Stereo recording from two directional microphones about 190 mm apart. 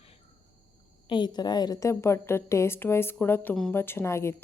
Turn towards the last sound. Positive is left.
turn(degrees=15)  # may be behind; listen again after turning